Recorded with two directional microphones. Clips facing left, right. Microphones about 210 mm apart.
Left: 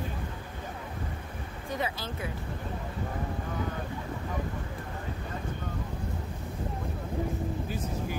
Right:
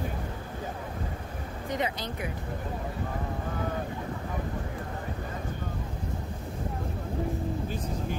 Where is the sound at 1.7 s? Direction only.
20° right (ahead or behind).